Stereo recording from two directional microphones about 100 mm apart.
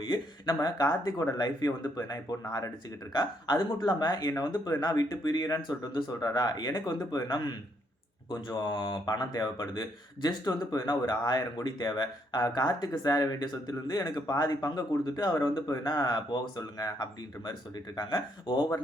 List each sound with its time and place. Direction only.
0.0 s speech: 45° left (ahead or behind)
3.1 s speech: 45° left (ahead or behind)